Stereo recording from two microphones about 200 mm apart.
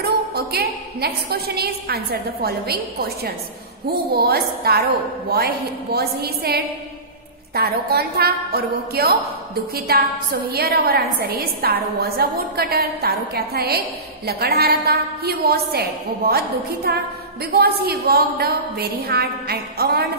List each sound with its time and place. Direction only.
0.0 s a woman's voice: 50° right (ahead or behind)